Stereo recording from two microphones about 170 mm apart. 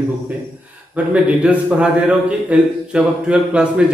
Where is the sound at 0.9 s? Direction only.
10° right (ahead or behind).